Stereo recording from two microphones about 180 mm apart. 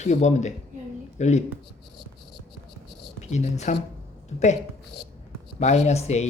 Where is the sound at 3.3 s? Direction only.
40° left (ahead or behind).